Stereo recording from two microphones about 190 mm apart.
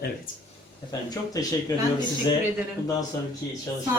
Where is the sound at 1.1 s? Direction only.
20° left (ahead or behind).